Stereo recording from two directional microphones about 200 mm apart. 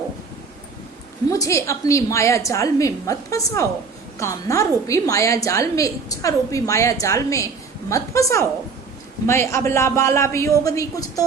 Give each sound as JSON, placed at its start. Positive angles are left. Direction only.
{"t": 1.3, "sound": "a woman's voice", "side_deg": 15}